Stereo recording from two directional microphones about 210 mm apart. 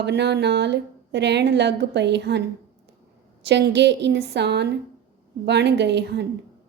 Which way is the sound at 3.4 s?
55° right (ahead or behind).